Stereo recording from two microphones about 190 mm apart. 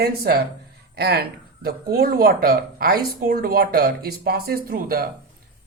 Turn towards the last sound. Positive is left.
turn(degrees=-50)  # may be behind; listen again after turning